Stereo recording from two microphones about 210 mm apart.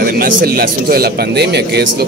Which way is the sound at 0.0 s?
45° right (ahead or behind).